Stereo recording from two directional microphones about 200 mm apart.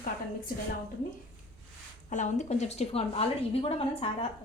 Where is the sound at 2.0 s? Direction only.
40° left (ahead or behind).